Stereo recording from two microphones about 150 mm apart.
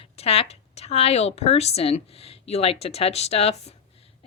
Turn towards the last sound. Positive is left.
turn(degrees=45)  # may be behind; listen again after turning